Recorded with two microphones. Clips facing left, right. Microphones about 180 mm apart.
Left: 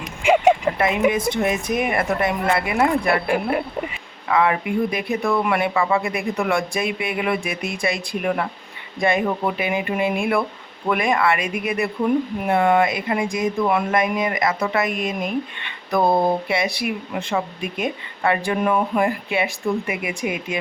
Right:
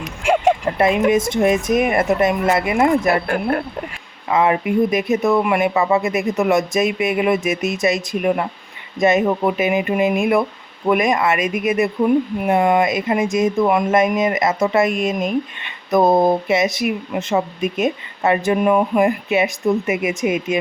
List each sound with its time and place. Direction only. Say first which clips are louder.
0.2 s a sound: left 1 dB; centre (ahead or behind)
1.1 s speech: right 5 dB; 45° right (ahead or behind)
1.8 s speech: right 5 dB; 25° right (ahead or behind)
3.2 s speech: right 1 dB; 5° left (ahead or behind)
4.3 s speech: right 3 dB; 25° right (ahead or behind)